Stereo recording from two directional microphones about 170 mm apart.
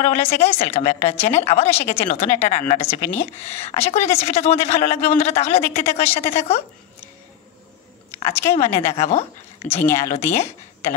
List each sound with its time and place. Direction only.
0.0 s a woman's voice: 40° left (ahead or behind)
8.1 s speech: 15° left (ahead or behind)
8.5 s a woman's voice: 40° left (ahead or behind)
9.8 s speech: 15° left (ahead or behind)
10.0 s a woman's voice: 40° left (ahead or behind)